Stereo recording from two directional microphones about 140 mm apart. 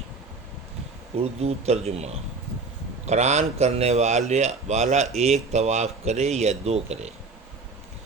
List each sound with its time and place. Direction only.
1.1 s speech: 50° right (ahead or behind)
3.1 s speech: 55° right (ahead or behind)